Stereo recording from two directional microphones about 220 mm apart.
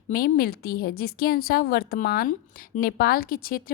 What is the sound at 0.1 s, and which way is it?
A woman's voice, 45° left (ahead or behind).